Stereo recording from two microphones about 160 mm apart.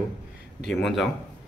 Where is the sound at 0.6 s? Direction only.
Centre (ahead or behind).